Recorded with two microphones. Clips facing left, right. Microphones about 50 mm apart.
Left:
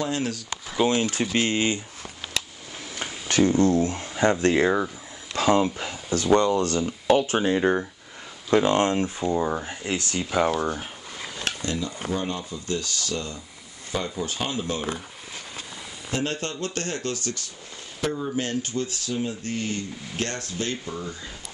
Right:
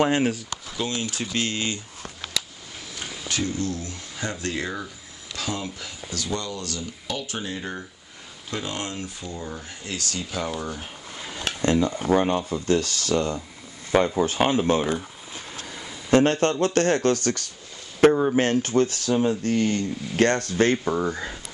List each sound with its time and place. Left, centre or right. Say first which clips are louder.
0.7 s speech: left 7 dB; left
3.0 s speech: left 7 dB; left
9.7 s speech: left 4 dB; left
11.6 s speech: right 12 dB; right
16.1 s speech: right 10 dB; right